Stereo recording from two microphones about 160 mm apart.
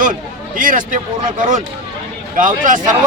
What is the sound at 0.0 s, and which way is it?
Speech, 55° right (ahead or behind).